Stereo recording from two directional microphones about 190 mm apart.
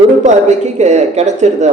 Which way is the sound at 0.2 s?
40° right (ahead or behind).